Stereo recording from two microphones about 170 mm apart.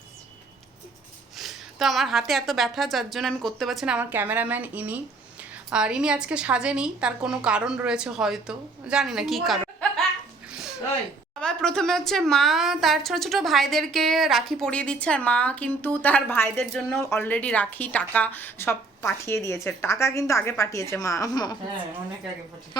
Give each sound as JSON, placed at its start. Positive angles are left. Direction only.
{"t": 1.4, "sound": "a woman's voice", "side_deg": 0}
{"t": 10.5, "sound": "a sound", "side_deg": -5}
{"t": 11.3, "sound": "a woman's voice", "side_deg": 5}